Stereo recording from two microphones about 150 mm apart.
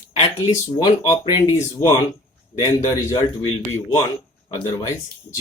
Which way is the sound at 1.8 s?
15° left (ahead or behind).